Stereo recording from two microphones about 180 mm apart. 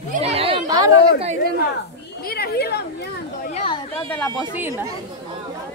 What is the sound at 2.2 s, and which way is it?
Speech, 60° left (ahead or behind).